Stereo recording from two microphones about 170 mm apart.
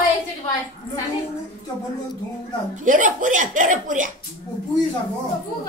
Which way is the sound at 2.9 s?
50° right (ahead or behind).